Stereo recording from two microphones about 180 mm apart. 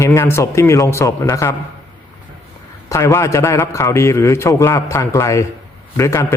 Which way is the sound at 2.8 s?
15° left (ahead or behind).